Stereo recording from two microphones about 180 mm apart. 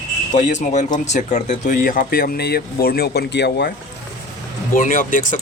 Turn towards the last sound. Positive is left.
turn(degrees=45)  # may be behind; listen again after turning